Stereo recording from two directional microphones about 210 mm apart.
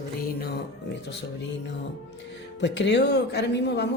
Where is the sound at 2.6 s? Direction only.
55° left (ahead or behind).